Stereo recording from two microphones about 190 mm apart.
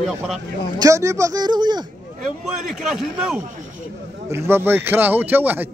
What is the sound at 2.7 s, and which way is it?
A man's voice, centre (ahead or behind).